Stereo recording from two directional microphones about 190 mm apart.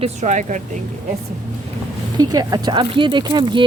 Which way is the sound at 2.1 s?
20° right (ahead or behind).